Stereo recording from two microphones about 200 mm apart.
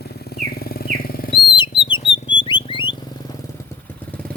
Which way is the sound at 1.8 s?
25° left (ahead or behind).